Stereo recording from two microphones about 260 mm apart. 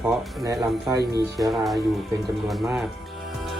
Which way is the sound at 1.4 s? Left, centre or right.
Centre.